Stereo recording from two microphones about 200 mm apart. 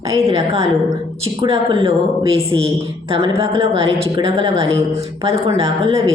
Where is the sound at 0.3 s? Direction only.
30° right (ahead or behind).